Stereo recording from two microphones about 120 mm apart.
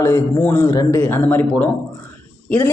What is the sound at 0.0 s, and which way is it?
A man's voice, 20° left (ahead or behind).